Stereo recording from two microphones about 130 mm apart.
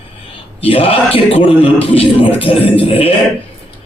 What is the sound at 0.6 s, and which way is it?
Speech, 45° left (ahead or behind).